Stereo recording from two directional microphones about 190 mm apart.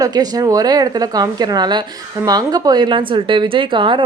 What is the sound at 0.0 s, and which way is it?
Speech, 20° right (ahead or behind).